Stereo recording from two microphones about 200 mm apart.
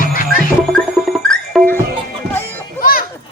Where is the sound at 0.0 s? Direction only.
45° left (ahead or behind).